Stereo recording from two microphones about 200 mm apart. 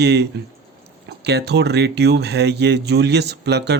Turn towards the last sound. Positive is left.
turn(degrees=-55)  # may be behind; listen again after turning